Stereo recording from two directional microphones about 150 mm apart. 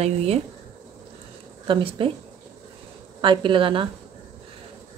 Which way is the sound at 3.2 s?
35° right (ahead or behind).